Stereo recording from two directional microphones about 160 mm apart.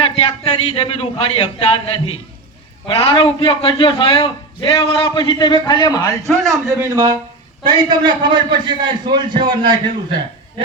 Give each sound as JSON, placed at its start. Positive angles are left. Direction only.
{"t": 0.0, "sound": "a man's voice", "side_deg": 35}
{"t": 4.8, "sound": "a man's voice", "side_deg": 35}
{"t": 6.2, "sound": "a man's voice", "side_deg": 0}
{"t": 6.7, "sound": "a man's voice", "side_deg": -25}